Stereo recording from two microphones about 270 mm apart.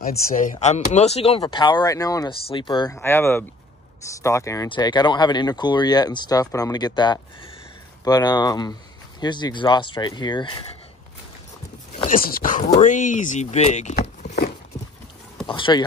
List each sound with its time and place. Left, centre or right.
0.0 s speech: left
12.1 s speech: left